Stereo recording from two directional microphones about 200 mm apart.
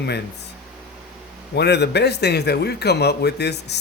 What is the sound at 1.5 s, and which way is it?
Speech, 55° left (ahead or behind).